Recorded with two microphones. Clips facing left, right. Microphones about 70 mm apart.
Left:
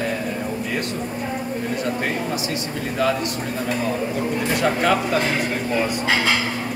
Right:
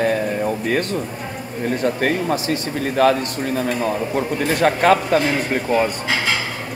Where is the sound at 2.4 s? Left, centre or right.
Right.